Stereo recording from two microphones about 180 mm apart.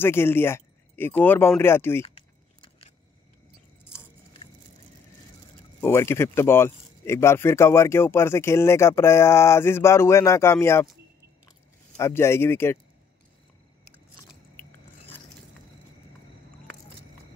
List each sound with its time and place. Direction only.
0.0 s speech: 10° left (ahead or behind)
2.0 s biting: 35° left (ahead or behind)
5.8 s speech: 15° left (ahead or behind)
12.0 s speech: 15° left (ahead or behind)
14.6 s biting: 15° left (ahead or behind)